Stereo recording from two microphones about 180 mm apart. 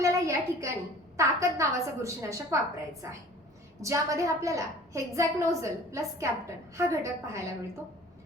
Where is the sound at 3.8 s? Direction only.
15° right (ahead or behind).